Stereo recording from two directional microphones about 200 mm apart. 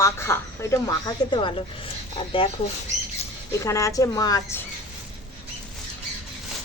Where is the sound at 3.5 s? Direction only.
15° left (ahead or behind).